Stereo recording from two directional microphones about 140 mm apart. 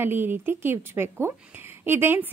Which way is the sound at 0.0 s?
15° right (ahead or behind).